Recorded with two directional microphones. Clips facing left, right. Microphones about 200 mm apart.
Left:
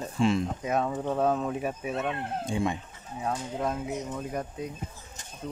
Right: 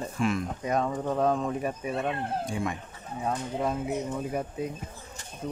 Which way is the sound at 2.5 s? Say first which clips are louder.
Left 3 dB; 25° left (ahead or behind).